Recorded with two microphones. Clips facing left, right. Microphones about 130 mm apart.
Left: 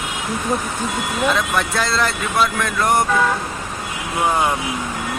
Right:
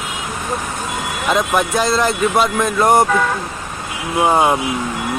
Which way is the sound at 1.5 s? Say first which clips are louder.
Right 4 dB; 20° right (ahead or behind).